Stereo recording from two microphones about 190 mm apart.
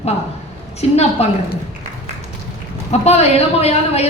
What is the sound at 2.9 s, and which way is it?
A woman's voice, 35° left (ahead or behind).